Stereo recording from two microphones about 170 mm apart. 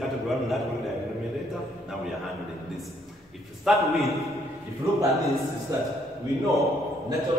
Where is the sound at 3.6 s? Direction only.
Centre (ahead or behind).